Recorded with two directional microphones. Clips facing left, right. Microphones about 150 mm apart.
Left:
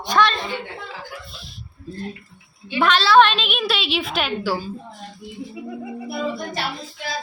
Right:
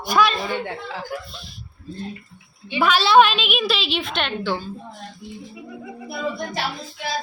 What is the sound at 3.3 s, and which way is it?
A woman's voice, centre (ahead or behind).